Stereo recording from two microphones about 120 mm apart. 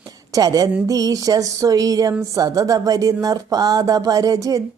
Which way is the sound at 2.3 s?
30° right (ahead or behind).